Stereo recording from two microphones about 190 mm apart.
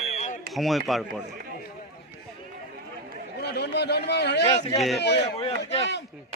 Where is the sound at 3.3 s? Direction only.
60° left (ahead or behind).